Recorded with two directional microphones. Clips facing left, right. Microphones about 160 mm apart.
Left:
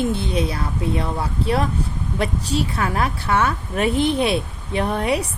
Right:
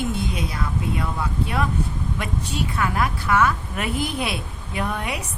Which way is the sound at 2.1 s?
35° left (ahead or behind).